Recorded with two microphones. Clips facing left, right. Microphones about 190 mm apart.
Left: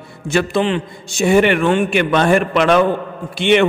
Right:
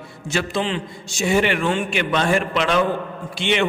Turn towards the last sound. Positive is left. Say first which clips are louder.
# left 7 dB
turn(degrees=60)  # may be behind; listen again after turning